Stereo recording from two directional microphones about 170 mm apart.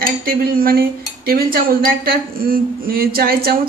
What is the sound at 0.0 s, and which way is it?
Cutlery, 60° right (ahead or behind).